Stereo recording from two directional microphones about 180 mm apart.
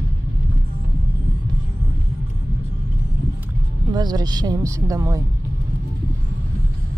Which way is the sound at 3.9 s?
25° right (ahead or behind).